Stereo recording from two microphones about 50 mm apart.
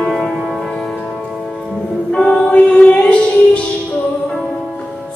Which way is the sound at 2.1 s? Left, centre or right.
Centre.